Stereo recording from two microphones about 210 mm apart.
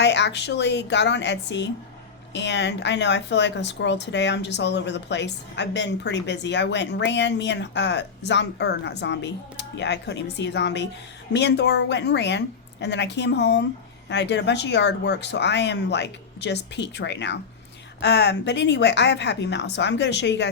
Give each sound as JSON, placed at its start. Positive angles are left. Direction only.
{"t": 0.0, "sound": "speech", "side_deg": 55}